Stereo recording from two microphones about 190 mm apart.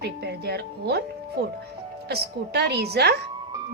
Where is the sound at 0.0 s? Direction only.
60° right (ahead or behind).